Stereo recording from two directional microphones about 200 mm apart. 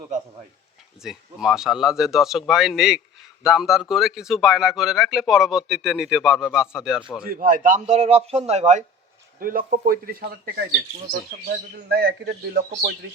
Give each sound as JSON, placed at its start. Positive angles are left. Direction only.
{"t": 1.0, "sound": "speech", "side_deg": 0}
{"t": 7.3, "sound": "a man's voice", "side_deg": -45}
{"t": 9.4, "sound": "a man's voice", "side_deg": -45}